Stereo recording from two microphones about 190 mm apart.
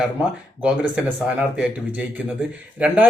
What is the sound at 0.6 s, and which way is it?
Speech, 5° right (ahead or behind).